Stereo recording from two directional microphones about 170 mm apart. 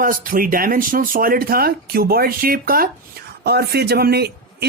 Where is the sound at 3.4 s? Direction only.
70° right (ahead or behind).